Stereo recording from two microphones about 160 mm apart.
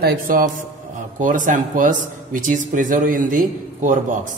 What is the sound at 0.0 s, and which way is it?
Speech, 65° right (ahead or behind).